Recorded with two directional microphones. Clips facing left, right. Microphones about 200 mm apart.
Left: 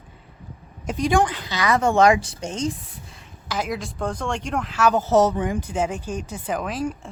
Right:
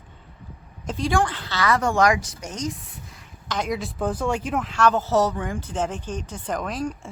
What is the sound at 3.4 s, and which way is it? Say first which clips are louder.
Speech: even; 5° left (ahead or behind).